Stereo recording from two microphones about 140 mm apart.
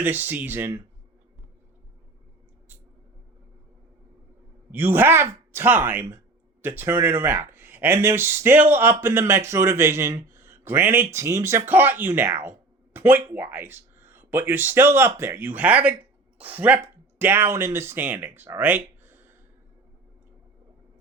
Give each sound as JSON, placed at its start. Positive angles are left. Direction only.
{"t": 0.0, "sound": "speech", "side_deg": -15}
{"t": 4.7, "sound": "speech", "side_deg": -15}